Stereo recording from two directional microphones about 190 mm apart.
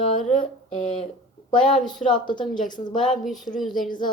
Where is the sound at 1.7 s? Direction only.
25° left (ahead or behind).